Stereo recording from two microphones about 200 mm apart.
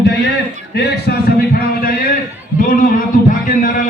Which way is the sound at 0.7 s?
55° left (ahead or behind).